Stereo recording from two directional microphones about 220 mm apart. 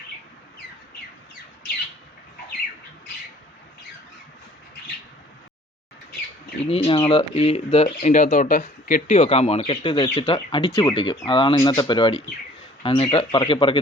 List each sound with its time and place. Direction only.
6.7 s speech: 25° left (ahead or behind)